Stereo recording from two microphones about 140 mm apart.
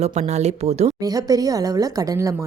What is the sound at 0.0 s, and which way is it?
Speech, 50° right (ahead or behind).